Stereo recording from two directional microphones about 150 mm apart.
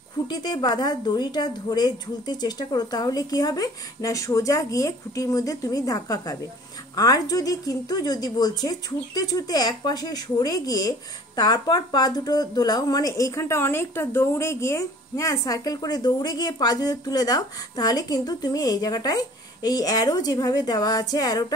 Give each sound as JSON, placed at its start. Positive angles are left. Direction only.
{"t": 0.3, "sound": "speech", "side_deg": 30}